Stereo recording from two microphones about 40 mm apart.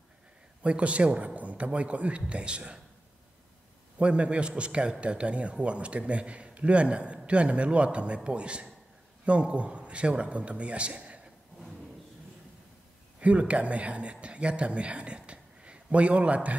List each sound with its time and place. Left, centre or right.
0.6 s a man's voice: right
4.0 s a man's voice: right
13.2 s a man's voice: right